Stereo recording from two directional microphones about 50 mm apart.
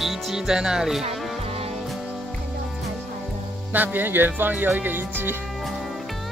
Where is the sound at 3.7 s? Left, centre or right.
Right.